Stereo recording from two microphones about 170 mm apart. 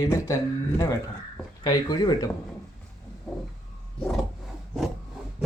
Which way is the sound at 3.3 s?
5° left (ahead or behind).